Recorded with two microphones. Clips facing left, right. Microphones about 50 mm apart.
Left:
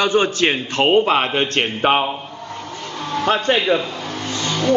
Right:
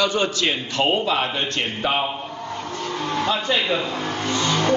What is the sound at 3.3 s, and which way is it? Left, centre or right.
Speech, left.